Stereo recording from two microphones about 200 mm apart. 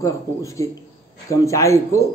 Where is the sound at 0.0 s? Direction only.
15° left (ahead or behind).